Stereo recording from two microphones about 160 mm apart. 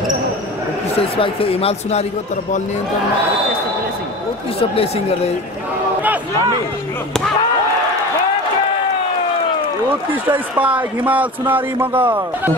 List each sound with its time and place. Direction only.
0.9 s speech: 35° left (ahead or behind)
4.6 s speech: 40° left (ahead or behind)
10.3 s a man's voice: 10° right (ahead or behind)